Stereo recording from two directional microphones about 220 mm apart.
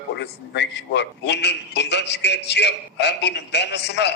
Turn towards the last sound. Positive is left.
turn(degrees=50)  # may be behind; listen again after turning